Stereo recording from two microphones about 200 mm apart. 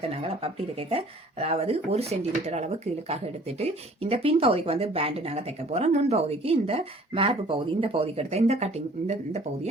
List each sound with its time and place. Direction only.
0.1 s speech: 30° right (ahead or behind)